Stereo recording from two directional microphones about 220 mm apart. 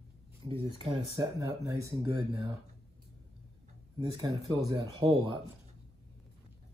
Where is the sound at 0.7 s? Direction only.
20° right (ahead or behind).